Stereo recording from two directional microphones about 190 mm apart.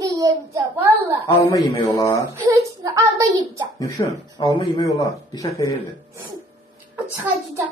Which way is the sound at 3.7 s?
15° left (ahead or behind).